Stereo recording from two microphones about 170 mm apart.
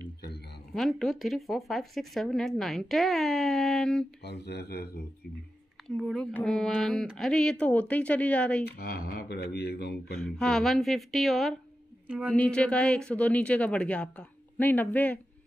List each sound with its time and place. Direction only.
0.7 s speech: centre (ahead or behind)
4.2 s speech: 80° left
5.9 s speech: centre (ahead or behind)
8.6 s speech: 65° left (ahead or behind)
10.2 s a woman's voice: 5° left (ahead or behind)
12.4 s speech: 5° left (ahead or behind)